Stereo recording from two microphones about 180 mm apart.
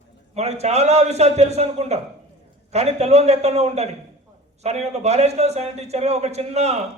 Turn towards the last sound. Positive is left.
turn(degrees=-35)  # may be behind; listen again after turning